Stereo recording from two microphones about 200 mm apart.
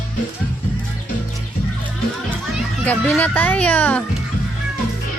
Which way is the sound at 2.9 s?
10° left (ahead or behind).